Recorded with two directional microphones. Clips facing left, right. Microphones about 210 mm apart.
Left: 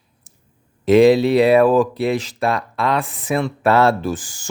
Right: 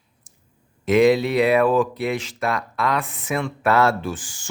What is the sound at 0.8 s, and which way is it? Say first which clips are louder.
Speech: left 5 dB; 30° left (ahead or behind).